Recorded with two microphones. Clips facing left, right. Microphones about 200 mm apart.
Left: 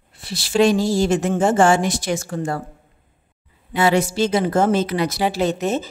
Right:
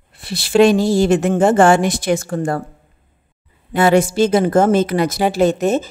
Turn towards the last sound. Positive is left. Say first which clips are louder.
# right 5 dB
turn(degrees=-50)  # may be behind; listen again after turning